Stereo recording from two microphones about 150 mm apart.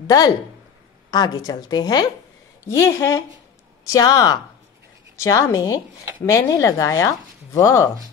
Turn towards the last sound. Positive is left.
turn(degrees=20)  # may be behind; listen again after turning